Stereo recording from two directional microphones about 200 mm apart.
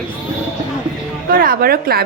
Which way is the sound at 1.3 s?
45° right (ahead or behind).